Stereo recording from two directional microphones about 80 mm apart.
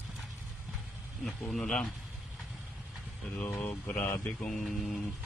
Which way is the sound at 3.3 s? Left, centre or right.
Left.